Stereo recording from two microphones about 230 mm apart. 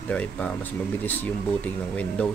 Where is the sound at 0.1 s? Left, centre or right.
Centre.